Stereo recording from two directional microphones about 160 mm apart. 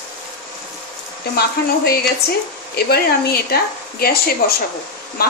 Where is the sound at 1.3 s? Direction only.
75° left (ahead or behind).